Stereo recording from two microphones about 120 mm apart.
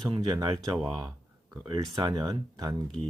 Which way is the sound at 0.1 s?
35° right (ahead or behind).